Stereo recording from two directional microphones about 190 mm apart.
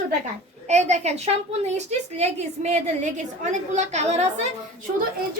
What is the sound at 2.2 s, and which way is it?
A woman's voice, 35° right (ahead or behind).